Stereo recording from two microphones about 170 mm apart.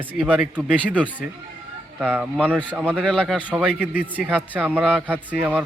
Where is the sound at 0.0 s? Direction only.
10° right (ahead or behind).